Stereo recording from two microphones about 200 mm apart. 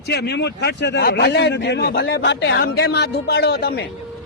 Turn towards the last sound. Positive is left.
turn(degrees=55)  # may be behind; listen again after turning